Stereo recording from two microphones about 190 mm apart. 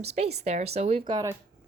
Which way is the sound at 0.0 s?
35° right (ahead or behind).